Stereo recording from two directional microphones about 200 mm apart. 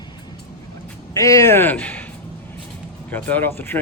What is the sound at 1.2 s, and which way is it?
Speech, 15° left (ahead or behind).